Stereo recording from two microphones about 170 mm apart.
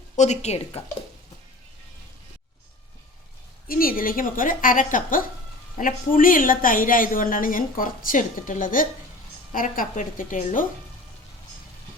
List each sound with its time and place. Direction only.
0.2 s speech: 40° left (ahead or behind)
3.7 s speech: 60° left (ahead or behind)